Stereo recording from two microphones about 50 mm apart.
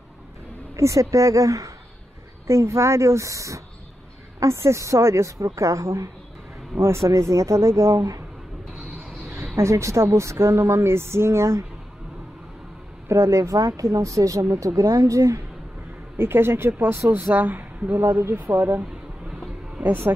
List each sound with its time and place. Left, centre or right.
0.7 s speech: right
2.4 s a woman's voice: right
6.8 s speech: right
9.6 s speech: right
13.1 s speech: right
16.2 s speech: right
17.2 s speech: right
20.1 s speech: right